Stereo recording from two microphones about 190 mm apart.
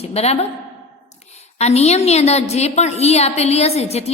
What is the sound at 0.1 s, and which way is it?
Speech, 35° left (ahead or behind).